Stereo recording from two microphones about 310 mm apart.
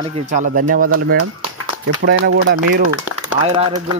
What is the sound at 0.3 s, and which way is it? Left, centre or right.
Speech, right.